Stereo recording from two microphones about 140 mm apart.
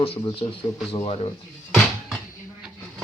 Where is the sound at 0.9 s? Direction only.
40° left (ahead or behind).